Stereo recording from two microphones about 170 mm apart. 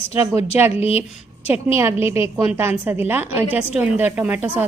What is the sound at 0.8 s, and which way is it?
Speech, 35° left (ahead or behind).